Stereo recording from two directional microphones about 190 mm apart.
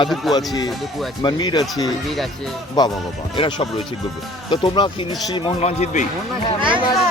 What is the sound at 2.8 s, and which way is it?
Speech, 20° left (ahead or behind).